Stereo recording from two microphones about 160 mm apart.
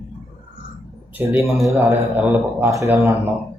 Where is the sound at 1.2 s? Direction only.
15° right (ahead or behind).